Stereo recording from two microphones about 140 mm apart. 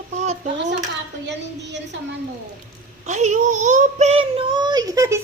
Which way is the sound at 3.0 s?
60° right (ahead or behind).